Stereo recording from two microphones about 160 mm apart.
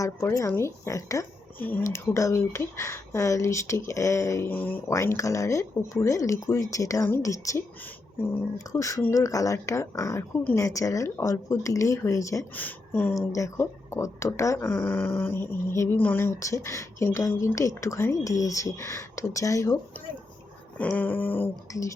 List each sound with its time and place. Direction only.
0.0 s speech: 20° left (ahead or behind)